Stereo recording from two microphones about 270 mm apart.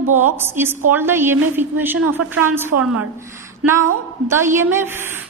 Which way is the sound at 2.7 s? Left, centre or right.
Right.